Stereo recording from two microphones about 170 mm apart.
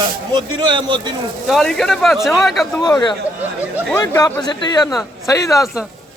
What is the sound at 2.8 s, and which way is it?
Speech, 25° left (ahead or behind).